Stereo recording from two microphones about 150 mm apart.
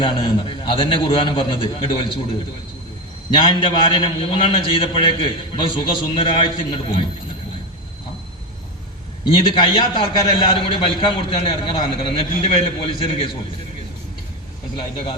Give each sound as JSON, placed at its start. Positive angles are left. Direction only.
{"t": 0.0, "sound": "a man's voice", "side_deg": 35}
{"t": 3.2, "sound": "a man's voice", "side_deg": 30}
{"t": 9.2, "sound": "a man's voice", "side_deg": 35}